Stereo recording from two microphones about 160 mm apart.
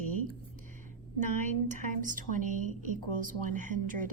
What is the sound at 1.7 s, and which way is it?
Speech, 55° right (ahead or behind).